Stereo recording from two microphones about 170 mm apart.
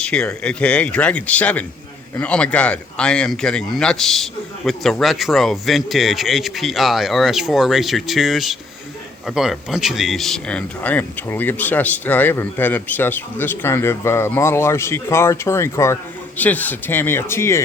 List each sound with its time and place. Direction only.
0.0 s a man's voice: 5° left (ahead or behind)